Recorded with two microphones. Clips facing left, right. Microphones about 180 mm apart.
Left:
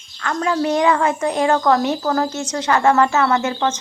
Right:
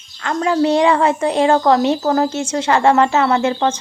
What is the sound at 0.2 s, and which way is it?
Speech, 25° right (ahead or behind).